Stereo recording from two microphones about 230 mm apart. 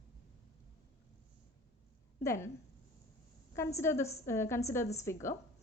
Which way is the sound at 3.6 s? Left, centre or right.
Centre.